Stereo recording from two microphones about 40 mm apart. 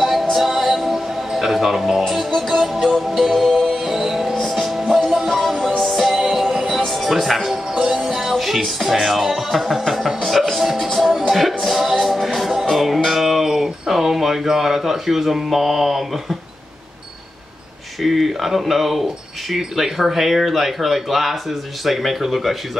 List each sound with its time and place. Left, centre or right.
0.0 s music: centre
5.9 s music: centre
7.7 s music: centre
8.4 s speech: centre
10.2 s music: centre
13.1 s speech: centre
18.0 s speech: centre